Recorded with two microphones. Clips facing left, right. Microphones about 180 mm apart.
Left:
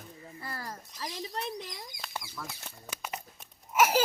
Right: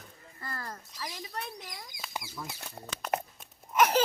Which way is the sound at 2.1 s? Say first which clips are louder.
Right 2 dB; 15° right (ahead or behind).